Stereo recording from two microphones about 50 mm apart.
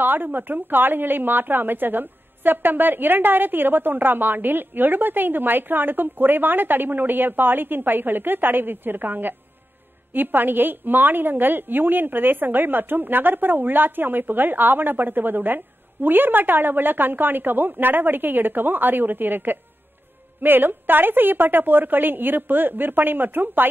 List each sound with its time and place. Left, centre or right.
0.0 s a woman's voice: right